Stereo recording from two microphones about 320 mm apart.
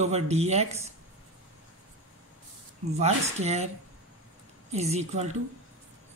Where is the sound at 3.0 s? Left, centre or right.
Right.